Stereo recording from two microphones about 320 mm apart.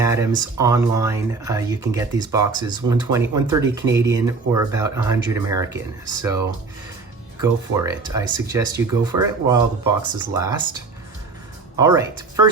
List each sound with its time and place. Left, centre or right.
0.0 s speech: centre
7.4 s speech: centre
11.8 s speech: centre